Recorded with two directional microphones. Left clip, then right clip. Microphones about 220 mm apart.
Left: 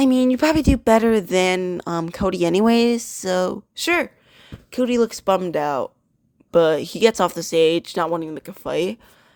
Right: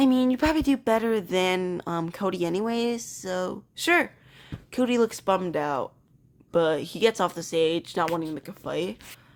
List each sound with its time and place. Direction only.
0.0 s speech: 30° left (ahead or behind)
5.2 s speech: 30° left (ahead or behind)